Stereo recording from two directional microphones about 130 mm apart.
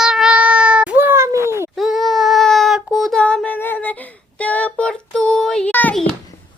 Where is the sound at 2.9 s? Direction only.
Centre (ahead or behind).